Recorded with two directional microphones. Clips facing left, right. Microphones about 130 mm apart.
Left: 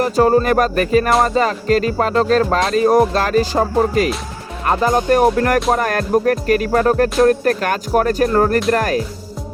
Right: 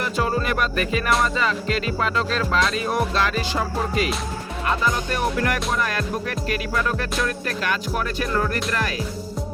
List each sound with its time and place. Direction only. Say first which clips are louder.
0.0 s music: left 10 dB; 40° left (ahead or behind)